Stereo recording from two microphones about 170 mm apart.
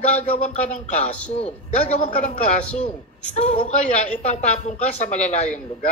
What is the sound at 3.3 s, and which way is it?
Speech, 40° left (ahead or behind).